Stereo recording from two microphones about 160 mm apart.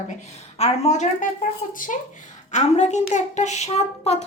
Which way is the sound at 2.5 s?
45° left (ahead or behind).